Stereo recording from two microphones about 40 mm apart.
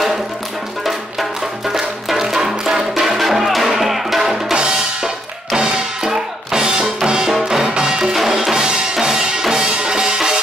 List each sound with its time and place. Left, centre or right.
1.7 s music: centre
4.6 s drum: centre
5.6 s music: centre
8.1 s music: centre